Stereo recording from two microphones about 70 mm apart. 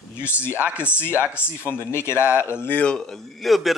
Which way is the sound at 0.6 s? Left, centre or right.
Right.